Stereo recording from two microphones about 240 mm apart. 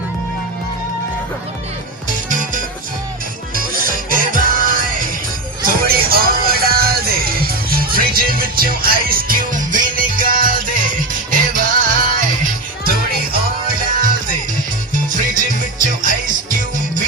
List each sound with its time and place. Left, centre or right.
2.0 s music: right
13.3 s music: right